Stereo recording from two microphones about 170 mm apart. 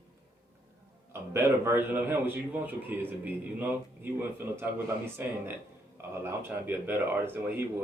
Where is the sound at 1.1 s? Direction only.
15° right (ahead or behind).